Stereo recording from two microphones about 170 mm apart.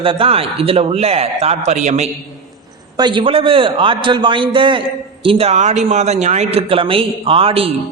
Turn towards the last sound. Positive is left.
turn(degrees=-35)  # may be behind; listen again after turning